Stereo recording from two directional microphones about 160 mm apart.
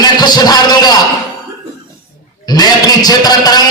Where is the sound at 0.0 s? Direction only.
25° left (ahead or behind).